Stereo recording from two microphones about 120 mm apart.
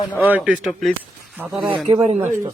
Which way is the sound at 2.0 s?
65° right (ahead or behind).